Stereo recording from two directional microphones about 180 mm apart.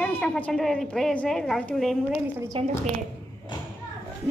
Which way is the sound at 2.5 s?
30° right (ahead or behind).